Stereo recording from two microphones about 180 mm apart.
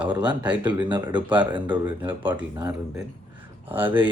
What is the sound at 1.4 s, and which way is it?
Speech, 25° right (ahead or behind).